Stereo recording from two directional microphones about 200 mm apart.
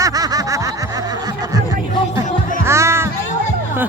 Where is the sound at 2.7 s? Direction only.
15° right (ahead or behind).